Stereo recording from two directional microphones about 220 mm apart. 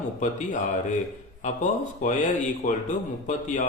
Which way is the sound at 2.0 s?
35° left (ahead or behind).